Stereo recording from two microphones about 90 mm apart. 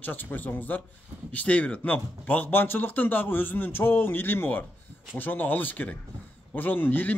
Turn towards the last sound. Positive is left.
turn(degrees=20)  # may be behind; listen again after turning